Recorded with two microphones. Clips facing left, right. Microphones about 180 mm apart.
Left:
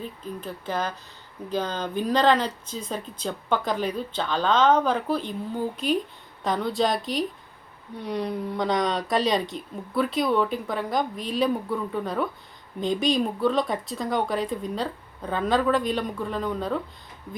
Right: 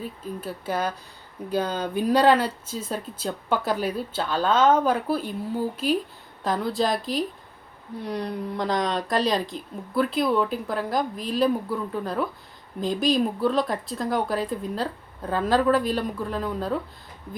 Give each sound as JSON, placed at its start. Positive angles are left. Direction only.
{"t": 0.0, "sound": "a woman's voice", "side_deg": -10}